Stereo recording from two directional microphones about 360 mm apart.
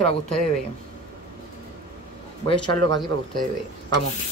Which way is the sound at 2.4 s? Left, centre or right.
Centre.